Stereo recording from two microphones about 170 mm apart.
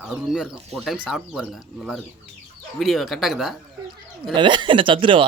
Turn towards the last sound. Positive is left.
turn(degrees=-30)  # may be behind; listen again after turning